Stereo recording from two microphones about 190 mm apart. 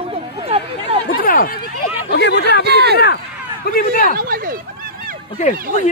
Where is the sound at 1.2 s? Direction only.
50° left (ahead or behind).